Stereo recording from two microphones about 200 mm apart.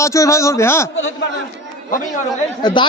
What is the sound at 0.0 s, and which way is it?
Speech, 15° left (ahead or behind).